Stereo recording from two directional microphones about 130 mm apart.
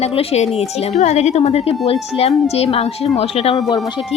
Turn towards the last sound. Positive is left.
turn(degrees=50)  # may be behind; listen again after turning